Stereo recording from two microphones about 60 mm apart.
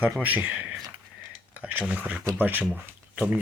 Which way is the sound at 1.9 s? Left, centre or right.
Right.